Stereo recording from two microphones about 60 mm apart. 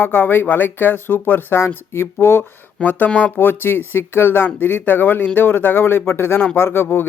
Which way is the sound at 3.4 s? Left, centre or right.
Left.